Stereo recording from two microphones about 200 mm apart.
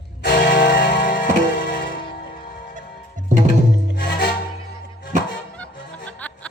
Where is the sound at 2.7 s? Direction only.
40° right (ahead or behind).